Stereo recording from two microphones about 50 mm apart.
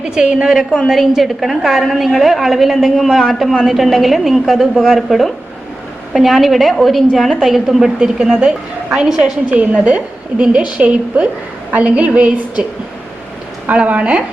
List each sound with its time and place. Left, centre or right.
0.0 s a woman's voice: centre
0.9 s a woman's voice: centre; by 12.6 s right
13.7 s a woman's voice: right